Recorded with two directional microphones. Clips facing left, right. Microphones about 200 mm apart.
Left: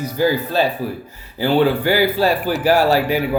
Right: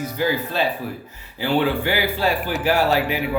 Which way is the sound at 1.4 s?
40° left (ahead or behind).